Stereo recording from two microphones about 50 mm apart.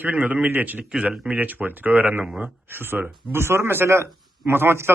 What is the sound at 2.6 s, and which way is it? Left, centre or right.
A man's voice, right.